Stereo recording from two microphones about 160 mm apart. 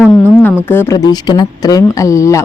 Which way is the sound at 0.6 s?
15° left (ahead or behind).